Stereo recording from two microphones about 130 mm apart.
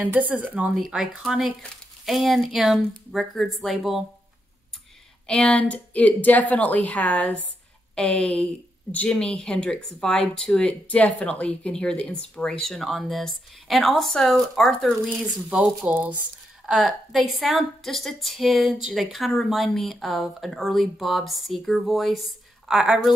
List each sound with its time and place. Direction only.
0.0 s speech: 15° right (ahead or behind)
5.2 s speech: 10° left (ahead or behind)
15.1 s speech: 10° right (ahead or behind)